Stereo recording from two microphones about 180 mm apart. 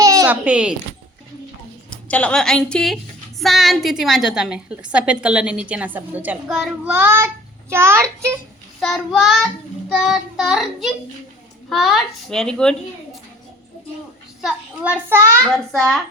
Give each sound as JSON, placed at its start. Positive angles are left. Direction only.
{"t": 0.0, "sound": "a sound", "side_deg": -20}
{"t": 0.4, "sound": "a woman's voice", "side_deg": -5}
{"t": 1.9, "sound": "a woman's voice", "side_deg": 5}
{"t": 8.8, "sound": "a woman's voice", "side_deg": 0}
{"t": 14.4, "sound": "a child's voice", "side_deg": -10}
{"t": 15.5, "sound": "a woman's voice", "side_deg": 0}